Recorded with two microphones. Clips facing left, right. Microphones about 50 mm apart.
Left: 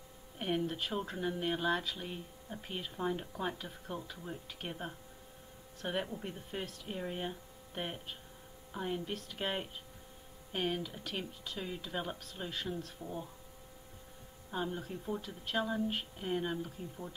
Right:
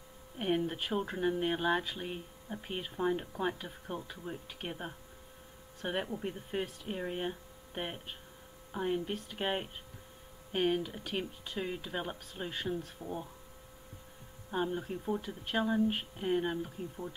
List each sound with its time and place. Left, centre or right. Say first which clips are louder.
0.4 s speech: right 2 dB; centre
12.7 s speech: right 3 dB; centre
14.7 s speech: right 4 dB; centre
15.2 s speech: right 1 dB; right